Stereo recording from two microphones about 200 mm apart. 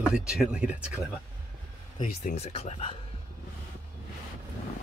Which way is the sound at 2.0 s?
40° left (ahead or behind).